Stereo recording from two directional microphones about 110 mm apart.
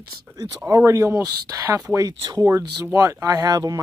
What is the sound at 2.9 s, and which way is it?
Speech, 30° right (ahead or behind).